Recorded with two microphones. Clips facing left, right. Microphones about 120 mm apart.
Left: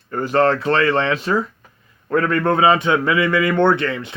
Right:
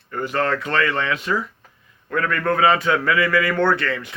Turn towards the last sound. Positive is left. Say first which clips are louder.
# left 3 dB
turn(degrees=20)  # may be behind; listen again after turning